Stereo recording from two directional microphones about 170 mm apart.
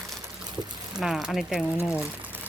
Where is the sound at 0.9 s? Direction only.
Centre (ahead or behind).